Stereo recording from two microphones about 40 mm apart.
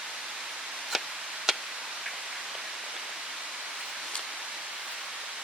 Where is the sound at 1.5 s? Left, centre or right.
Centre.